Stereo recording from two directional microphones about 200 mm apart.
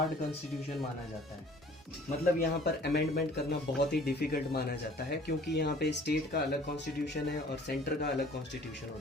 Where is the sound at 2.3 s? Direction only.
55° left (ahead or behind).